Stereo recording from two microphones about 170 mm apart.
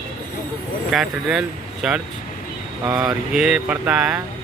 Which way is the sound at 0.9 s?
5° right (ahead or behind).